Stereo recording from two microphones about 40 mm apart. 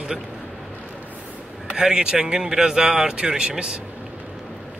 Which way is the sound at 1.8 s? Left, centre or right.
Centre.